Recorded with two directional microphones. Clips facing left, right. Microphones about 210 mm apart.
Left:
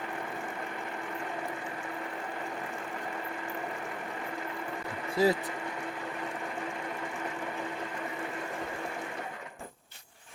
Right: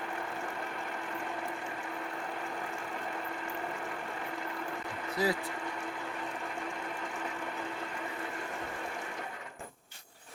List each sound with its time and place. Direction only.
5.1 s speech: 25° left (ahead or behind)